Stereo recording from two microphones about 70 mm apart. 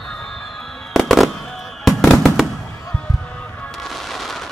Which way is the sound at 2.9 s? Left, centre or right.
Centre.